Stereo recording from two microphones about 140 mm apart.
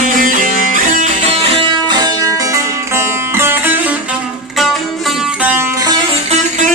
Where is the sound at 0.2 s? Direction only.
70° right (ahead or behind).